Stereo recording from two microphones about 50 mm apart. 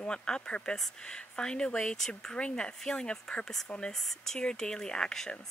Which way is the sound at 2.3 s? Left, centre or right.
Centre.